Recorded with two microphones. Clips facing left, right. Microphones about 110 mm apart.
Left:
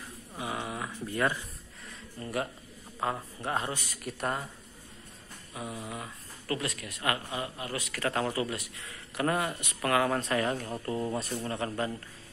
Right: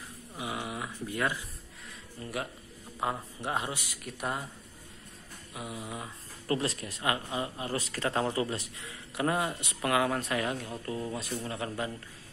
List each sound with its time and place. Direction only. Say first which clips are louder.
0.4 s a sound: left 1 dB; 10° right (ahead or behind)
2.1 s speech: left 3 dB; centre (ahead or behind)
3.0 s speech: even; 15° right (ahead or behind)
5.5 s speech: left 1 dB; 15° right (ahead or behind); by 7.0 s 30° right (ahead or behind)
7.0 s a man's voice: right 1 dB; 20° right (ahead or behind)
8.8 s a man's voice: left 1 dB; 15° right (ahead or behind)